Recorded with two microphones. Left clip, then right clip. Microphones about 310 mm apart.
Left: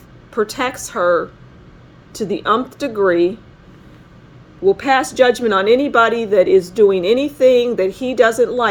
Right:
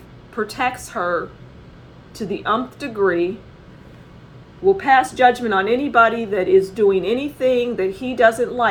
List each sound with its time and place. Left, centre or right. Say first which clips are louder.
0.3 s speech: left 3 dB; left
4.6 s speech: even; left